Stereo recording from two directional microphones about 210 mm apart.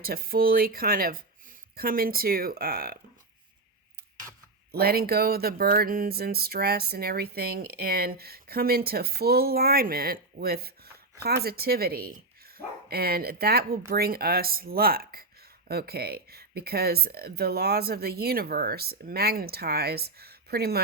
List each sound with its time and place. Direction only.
0.0 s speech: 45° right (ahead or behind)
4.7 s speech: 45° right (ahead or behind)